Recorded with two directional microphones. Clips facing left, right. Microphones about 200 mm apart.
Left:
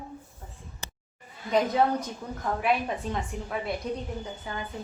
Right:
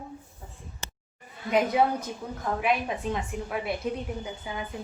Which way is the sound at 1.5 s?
10° right (ahead or behind).